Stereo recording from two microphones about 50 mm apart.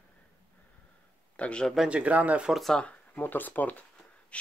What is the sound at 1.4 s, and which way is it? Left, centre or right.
Speech, left.